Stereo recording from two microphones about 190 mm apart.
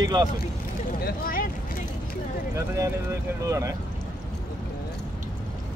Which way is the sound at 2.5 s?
15° right (ahead or behind).